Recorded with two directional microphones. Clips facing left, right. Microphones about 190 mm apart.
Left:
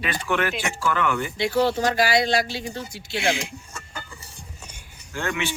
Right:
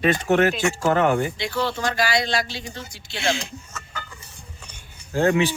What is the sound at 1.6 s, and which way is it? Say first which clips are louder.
Speech: left 3 dB; 45° left (ahead or behind).